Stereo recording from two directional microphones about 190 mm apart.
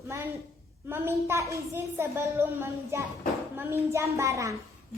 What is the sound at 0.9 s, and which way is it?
A child's voice, 10° right (ahead or behind).